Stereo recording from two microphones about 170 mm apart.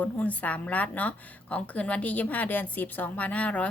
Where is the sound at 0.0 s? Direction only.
10° left (ahead or behind).